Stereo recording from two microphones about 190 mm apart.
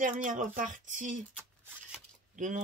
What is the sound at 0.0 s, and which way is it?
Speech, 45° right (ahead or behind).